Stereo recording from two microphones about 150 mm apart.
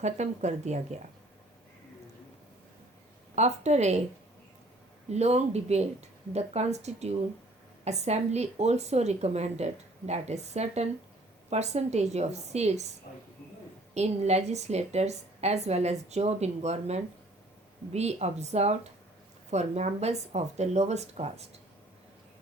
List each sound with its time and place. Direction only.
0.0 s a woman's voice: 50° right (ahead or behind)
3.3 s a woman's voice: 50° right (ahead or behind)
5.1 s a woman's voice: 45° right (ahead or behind)
13.9 s a woman's voice: 45° right (ahead or behind)